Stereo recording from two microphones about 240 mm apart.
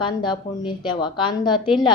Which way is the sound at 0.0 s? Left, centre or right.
Centre.